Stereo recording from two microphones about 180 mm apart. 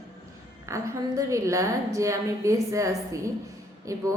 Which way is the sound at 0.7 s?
15° right (ahead or behind).